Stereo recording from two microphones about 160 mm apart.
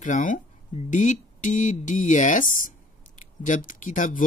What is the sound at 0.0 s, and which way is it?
Speech, 55° left (ahead or behind).